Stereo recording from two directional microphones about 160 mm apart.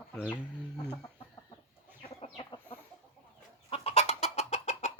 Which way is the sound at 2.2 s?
35° left (ahead or behind).